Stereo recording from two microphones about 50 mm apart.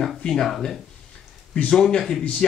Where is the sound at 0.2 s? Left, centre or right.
Centre.